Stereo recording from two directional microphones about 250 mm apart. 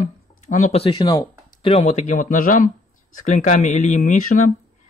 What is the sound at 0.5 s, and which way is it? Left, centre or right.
A man's voice, left.